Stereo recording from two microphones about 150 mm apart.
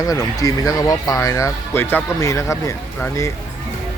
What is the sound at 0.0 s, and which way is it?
Speech, 25° left (ahead or behind).